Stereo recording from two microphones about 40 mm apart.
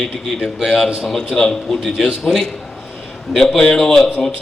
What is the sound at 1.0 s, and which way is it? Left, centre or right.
Speech, centre.